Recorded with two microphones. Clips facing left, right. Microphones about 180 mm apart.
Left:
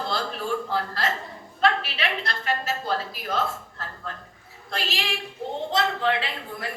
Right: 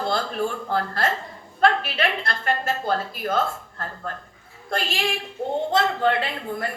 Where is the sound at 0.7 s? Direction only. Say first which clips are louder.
Right 3 dB; 50° right (ahead or behind).